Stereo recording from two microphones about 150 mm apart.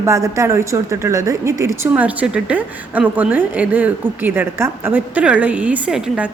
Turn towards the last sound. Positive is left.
turn(degrees=-5)  # may be behind; listen again after turning